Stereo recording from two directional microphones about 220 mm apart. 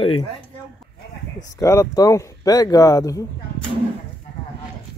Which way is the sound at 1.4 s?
15° left (ahead or behind).